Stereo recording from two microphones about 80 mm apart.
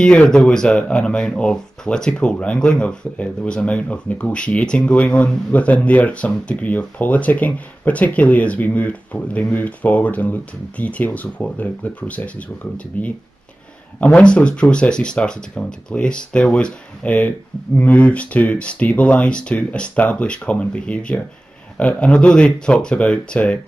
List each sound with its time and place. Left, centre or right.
0.0 s speech: centre